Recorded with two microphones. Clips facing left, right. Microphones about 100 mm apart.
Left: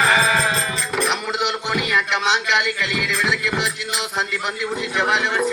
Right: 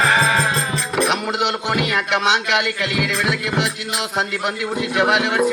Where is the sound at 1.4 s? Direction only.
50° right (ahead or behind).